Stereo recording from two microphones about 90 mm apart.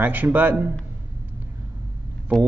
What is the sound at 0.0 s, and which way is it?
Speech, 20° right (ahead or behind).